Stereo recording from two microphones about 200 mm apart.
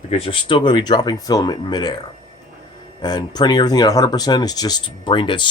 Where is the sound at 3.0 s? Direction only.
20° left (ahead or behind).